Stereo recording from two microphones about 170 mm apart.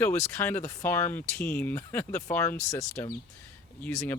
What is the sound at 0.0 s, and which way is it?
Speech, 10° left (ahead or behind).